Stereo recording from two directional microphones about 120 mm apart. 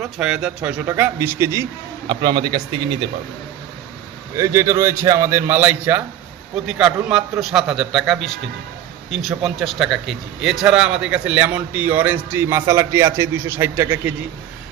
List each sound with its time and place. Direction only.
0.0 s a man's voice: 5° right (ahead or behind); by 1.6 s 25° right (ahead or behind)
2.0 s a man's voice: 40° right (ahead or behind)
4.4 s a man's voice: 25° right (ahead or behind)